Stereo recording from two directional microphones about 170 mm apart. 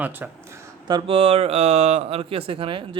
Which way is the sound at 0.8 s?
30° right (ahead or behind).